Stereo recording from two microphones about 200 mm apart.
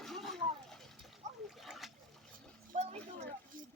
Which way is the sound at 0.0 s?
Centre (ahead or behind).